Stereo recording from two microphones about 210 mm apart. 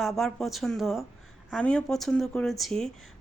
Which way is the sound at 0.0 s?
Centre (ahead or behind).